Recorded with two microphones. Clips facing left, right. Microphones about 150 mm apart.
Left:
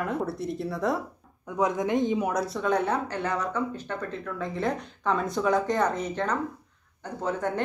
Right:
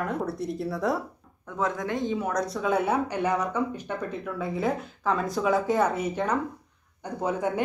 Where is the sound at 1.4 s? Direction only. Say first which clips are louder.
Left 3 dB; 15° left (ahead or behind).